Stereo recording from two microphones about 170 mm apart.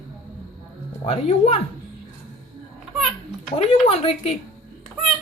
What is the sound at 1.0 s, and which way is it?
Speech, 35° left (ahead or behind).